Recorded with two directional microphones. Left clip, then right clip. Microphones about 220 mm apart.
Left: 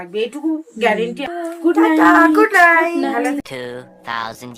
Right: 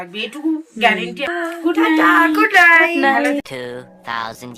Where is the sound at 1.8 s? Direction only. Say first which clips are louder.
Left 1 dB; 15° left (ahead or behind).